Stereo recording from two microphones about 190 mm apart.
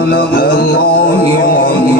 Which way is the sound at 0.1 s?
55° left (ahead or behind).